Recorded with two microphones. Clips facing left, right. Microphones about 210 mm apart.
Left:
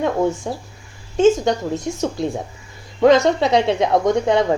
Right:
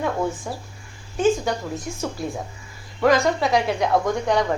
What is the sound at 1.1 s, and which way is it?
A woman's voice, 25° left (ahead or behind).